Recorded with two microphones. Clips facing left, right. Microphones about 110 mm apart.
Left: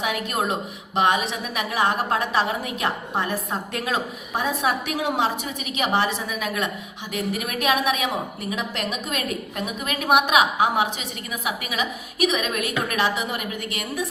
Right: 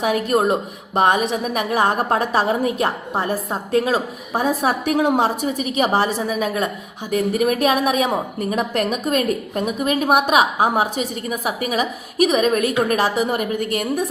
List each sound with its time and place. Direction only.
0.0 s a woman's voice: 40° right (ahead or behind)